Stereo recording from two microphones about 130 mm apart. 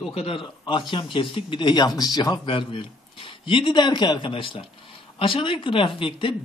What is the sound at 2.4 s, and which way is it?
Speech, 45° left (ahead or behind).